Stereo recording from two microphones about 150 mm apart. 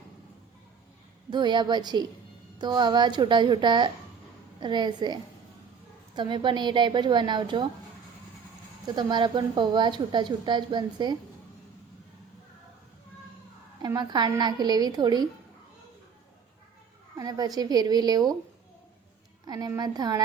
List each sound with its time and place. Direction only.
1.3 s a woman's voice: 30° right (ahead or behind)
9.0 s a woman's voice: 30° right (ahead or behind)
13.8 s a woman's voice: 25° right (ahead or behind)
17.2 s a woman's voice: 25° right (ahead or behind)
19.5 s a woman's voice: 25° right (ahead or behind)